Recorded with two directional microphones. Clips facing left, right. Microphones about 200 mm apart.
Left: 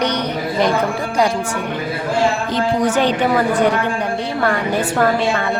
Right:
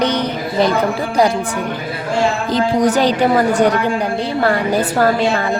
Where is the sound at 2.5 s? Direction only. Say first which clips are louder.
Right 3 dB; 35° right (ahead or behind).